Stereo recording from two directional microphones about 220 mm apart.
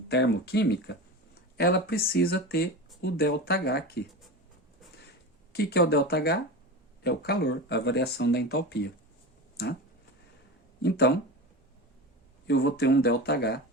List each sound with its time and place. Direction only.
0.1 s speech: 50° left (ahead or behind)
5.5 s speech: 45° left (ahead or behind)
10.8 s speech: 50° left (ahead or behind)
12.5 s speech: 50° left (ahead or behind)